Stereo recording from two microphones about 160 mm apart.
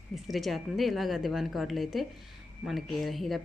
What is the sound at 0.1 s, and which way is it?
A woman's voice, centre (ahead or behind).